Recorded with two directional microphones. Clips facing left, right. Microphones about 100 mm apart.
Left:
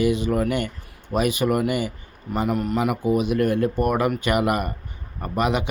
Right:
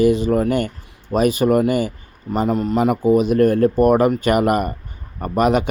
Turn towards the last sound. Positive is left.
turn(degrees=-45)  # may be behind; listen again after turning